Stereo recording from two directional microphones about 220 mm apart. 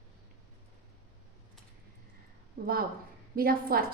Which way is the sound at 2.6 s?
40° right (ahead or behind).